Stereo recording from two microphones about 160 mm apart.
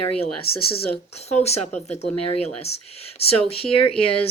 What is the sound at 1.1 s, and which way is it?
Speech, 40° left (ahead or behind).